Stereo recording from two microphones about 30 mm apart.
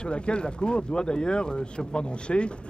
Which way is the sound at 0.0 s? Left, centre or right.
Left.